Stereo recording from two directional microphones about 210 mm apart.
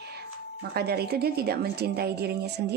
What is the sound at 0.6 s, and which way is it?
A woman's voice, 50° right (ahead or behind).